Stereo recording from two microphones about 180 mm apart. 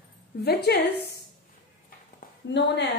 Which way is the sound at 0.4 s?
65° left (ahead or behind).